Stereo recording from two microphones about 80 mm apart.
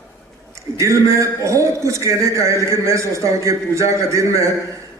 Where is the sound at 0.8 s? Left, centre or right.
Right.